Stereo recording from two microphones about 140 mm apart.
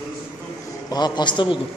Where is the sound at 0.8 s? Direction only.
30° left (ahead or behind).